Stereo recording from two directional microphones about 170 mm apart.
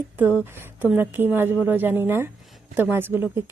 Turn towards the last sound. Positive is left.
turn(degrees=-15)  # may be behind; listen again after turning